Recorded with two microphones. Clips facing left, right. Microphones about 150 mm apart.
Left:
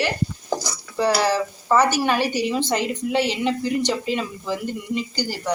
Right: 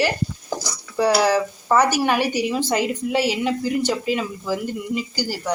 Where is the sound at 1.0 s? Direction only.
5° right (ahead or behind).